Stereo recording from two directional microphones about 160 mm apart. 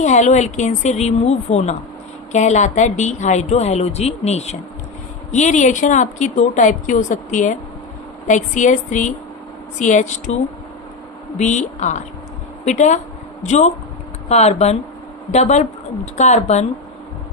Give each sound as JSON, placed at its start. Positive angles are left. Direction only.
{"t": 0.0, "sound": "a woman's voice", "side_deg": 45}